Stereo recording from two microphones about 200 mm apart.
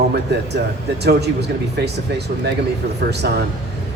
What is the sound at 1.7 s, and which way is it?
A man's voice, 55° right (ahead or behind).